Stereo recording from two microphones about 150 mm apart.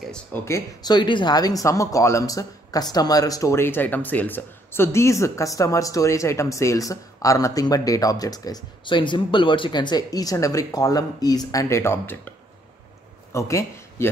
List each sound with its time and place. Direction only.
0.0 s speech: 5° left (ahead or behind)
0.5 s speech: 30° left (ahead or behind)